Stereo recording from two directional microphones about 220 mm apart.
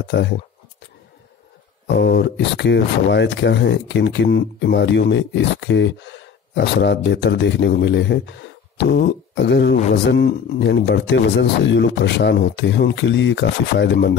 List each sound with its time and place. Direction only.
0.0 s speech: 50° left (ahead or behind)
2.0 s speech: 50° left (ahead or behind)
8.7 s a sound: 50° left (ahead or behind)
10.0 s speech: 50° left (ahead or behind)